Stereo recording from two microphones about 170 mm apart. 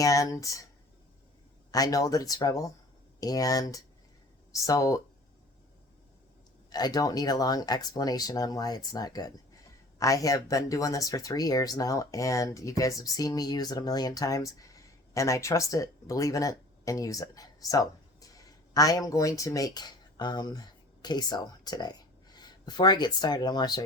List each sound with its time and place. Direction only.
0.0 s speech: 20° left (ahead or behind)
1.7 s speech: 20° left (ahead or behind)
6.7 s speech: 25° left (ahead or behind)